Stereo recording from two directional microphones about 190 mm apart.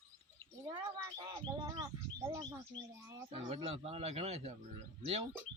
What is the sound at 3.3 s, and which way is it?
Speech, 30° right (ahead or behind).